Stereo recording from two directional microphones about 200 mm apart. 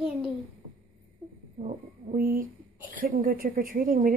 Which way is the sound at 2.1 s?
45° right (ahead or behind).